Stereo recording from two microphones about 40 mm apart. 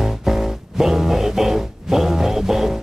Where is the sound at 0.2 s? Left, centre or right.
Centre.